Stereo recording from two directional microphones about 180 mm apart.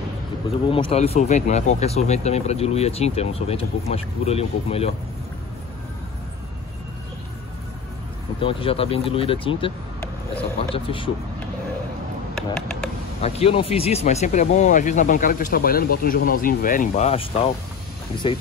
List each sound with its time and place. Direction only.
0.7 s speech: 30° left (ahead or behind)
8.4 s speech: 30° left (ahead or behind)
10.7 s speech: 30° left (ahead or behind)
12.4 s a sound: 5° left (ahead or behind)
13.2 s speech: 30° left (ahead or behind)